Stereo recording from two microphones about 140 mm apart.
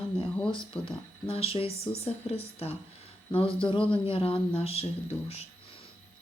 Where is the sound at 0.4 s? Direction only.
35° left (ahead or behind).